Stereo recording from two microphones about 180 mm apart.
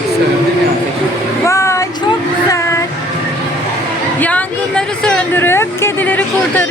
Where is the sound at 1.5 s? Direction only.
15° left (ahead or behind).